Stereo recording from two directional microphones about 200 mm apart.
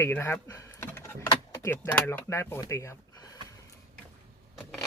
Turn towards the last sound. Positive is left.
turn(degrees=15)  # may be behind; listen again after turning